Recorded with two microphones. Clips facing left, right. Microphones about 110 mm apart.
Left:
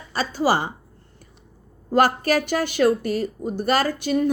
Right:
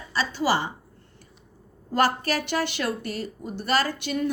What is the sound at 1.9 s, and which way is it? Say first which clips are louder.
A woman's voice: left 5 dB; 45° left (ahead or behind).